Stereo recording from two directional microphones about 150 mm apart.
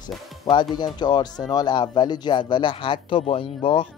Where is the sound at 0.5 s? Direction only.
30° left (ahead or behind).